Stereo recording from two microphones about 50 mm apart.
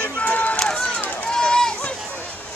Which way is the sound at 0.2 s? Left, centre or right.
Left.